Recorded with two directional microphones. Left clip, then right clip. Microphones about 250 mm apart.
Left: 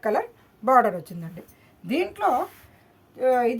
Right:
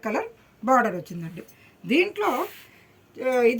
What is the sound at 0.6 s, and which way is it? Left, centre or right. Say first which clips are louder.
Speech: left 2 dB; left.